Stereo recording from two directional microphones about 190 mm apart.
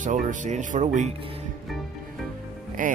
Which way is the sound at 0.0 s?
40° right (ahead or behind).